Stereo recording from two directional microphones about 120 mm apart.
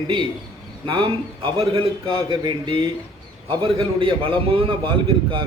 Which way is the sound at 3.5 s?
45° right (ahead or behind).